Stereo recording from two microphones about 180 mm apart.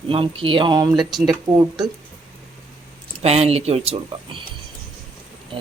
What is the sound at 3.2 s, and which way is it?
Speech, 35° right (ahead or behind).